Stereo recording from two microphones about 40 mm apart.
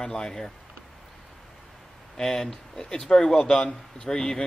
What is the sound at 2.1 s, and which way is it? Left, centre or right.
Speech, centre.